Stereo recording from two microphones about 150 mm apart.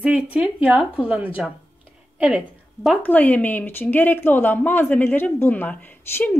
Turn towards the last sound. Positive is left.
turn(degrees=10)  # may be behind; listen again after turning